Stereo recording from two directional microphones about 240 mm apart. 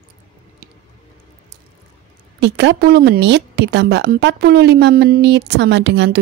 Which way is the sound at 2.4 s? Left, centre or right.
Right.